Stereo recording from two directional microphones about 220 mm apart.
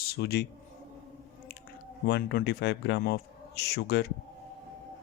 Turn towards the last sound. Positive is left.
turn(degrees=50)  # may be behind; listen again after turning